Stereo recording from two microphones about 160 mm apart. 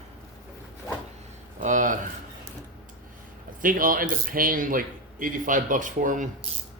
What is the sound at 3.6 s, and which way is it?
A man's voice, 60° right (ahead or behind).